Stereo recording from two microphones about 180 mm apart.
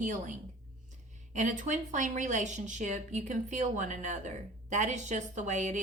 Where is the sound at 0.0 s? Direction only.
45° right (ahead or behind).